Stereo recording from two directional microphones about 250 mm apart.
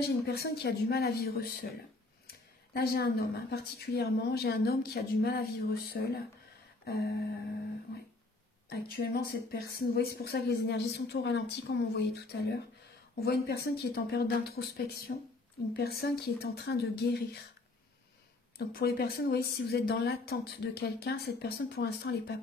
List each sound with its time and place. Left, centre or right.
0.3 s speech: left
6.8 s a sound: left
8.6 s speech: left
18.7 s speech: left